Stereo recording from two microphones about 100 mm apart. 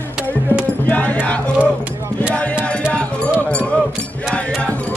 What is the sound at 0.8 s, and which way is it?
Music, 15° left (ahead or behind).